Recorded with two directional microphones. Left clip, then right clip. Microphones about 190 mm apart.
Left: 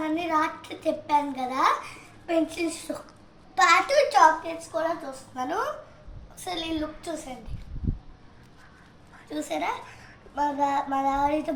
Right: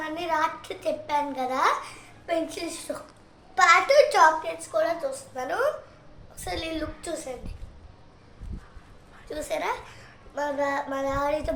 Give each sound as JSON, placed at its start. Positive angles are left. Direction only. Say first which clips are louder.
{"t": 0.0, "sound": "a child's voice", "louder": "left 1 dB", "side_deg": -25}
{"t": 6.3, "sound": "a child's voice", "louder": "left 1 dB", "side_deg": -15}
{"t": 9.3, "sound": "a sound", "louder": "even", "side_deg": -35}